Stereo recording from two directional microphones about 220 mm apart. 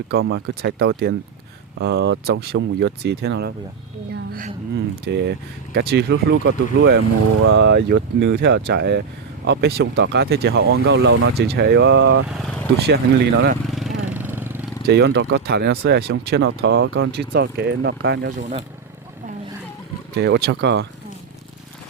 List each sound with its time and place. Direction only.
0.2 s a woman's voice: 55° right (ahead or behind)
13.7 s vehicle: centre (ahead or behind)
14.8 s speech: 50° right (ahead or behind)
18.3 s speech: 30° right (ahead or behind)
20.1 s speech: 50° right (ahead or behind)